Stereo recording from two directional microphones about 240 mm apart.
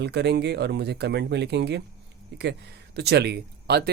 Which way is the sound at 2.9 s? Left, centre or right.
Right.